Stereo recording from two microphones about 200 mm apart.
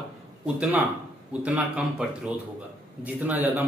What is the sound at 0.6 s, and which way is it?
A man's voice, 10° right (ahead or behind).